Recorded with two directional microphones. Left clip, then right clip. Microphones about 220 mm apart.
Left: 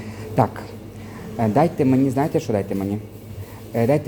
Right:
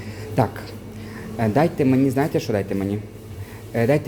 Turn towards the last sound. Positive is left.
turn(degrees=0)  # may be behind; listen again after turning